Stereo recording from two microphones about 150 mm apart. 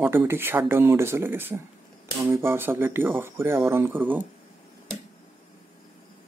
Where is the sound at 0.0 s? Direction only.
15° right (ahead or behind).